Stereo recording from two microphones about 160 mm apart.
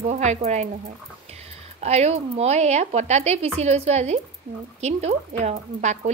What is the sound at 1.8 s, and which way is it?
Speech, 45° right (ahead or behind).